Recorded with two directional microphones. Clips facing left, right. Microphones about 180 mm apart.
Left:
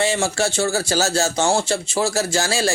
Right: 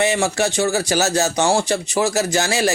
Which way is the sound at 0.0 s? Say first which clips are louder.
Right 2 dB; 20° right (ahead or behind).